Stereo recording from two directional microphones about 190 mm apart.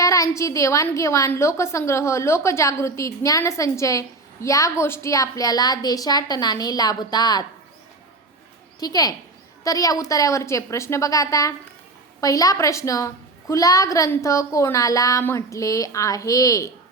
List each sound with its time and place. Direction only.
0.0 s a woman's voice: 20° left (ahead or behind)
8.8 s a woman's voice: 20° left (ahead or behind)